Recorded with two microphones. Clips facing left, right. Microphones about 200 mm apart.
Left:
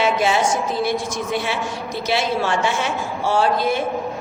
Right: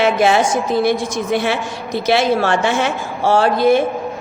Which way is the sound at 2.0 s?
80° right.